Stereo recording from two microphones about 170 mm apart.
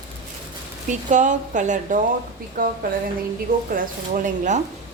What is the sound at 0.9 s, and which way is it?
A woman's voice, 45° right (ahead or behind).